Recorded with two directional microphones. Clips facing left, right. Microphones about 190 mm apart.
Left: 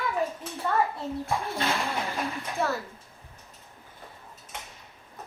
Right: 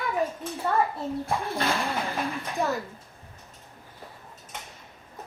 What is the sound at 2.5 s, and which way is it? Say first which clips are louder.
Speech: right 1 dB; 15° right (ahead or behind).